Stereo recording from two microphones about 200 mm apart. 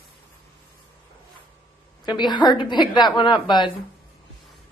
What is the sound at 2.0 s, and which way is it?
A woman's voice, 20° left (ahead or behind).